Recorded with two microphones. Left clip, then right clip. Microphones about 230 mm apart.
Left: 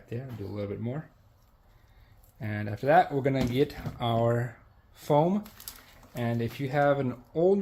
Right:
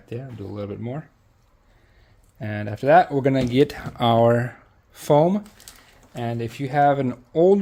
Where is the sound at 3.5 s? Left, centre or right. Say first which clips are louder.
Right 8 dB; right.